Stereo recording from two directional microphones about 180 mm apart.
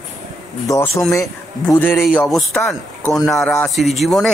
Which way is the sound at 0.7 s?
15° left (ahead or behind).